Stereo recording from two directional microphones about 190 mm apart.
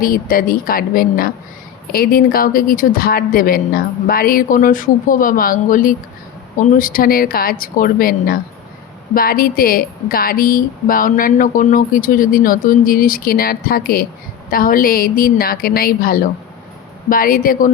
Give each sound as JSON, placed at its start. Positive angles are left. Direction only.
{"t": 0.0, "sound": "a woman's voice", "side_deg": 50}